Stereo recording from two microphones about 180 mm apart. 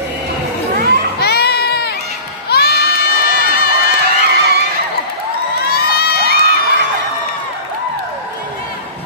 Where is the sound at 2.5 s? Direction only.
60° left (ahead or behind).